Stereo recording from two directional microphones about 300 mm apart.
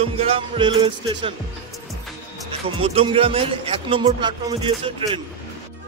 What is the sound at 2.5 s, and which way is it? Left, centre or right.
A man's voice, centre.